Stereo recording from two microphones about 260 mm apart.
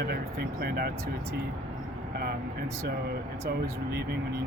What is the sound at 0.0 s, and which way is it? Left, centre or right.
Speech, right.